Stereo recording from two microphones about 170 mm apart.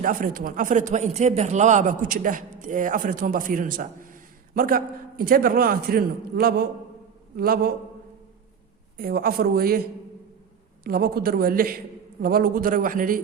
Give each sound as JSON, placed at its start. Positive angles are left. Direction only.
{"t": 0.0, "sound": "a man's voice", "side_deg": -55}
{"t": 9.0, "sound": "a man's voice", "side_deg": -60}
{"t": 10.8, "sound": "a man's voice", "side_deg": -60}